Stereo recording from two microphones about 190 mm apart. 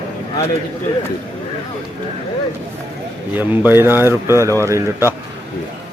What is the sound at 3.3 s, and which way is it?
Speech, 10° right (ahead or behind).